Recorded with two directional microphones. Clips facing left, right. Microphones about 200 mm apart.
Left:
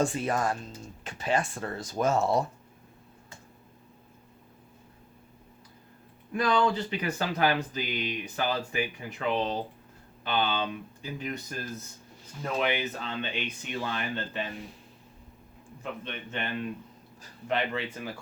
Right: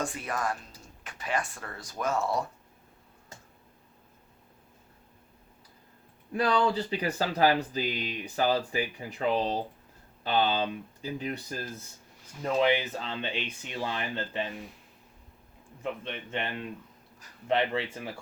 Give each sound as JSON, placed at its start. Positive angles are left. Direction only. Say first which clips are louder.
{"t": 0.0, "sound": "speech", "louder": "left 5 dB", "side_deg": 25}
{"t": 6.3, "sound": "speech", "louder": "even", "side_deg": -35}
{"t": 15.8, "sound": "speech", "louder": "right 2 dB", "side_deg": -25}
{"t": 17.5, "sound": "speech", "louder": "right 2 dB", "side_deg": -30}